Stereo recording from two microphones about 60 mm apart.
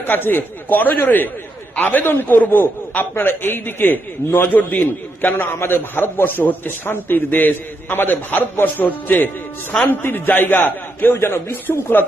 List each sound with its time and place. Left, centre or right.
0.0 s a man's voice: left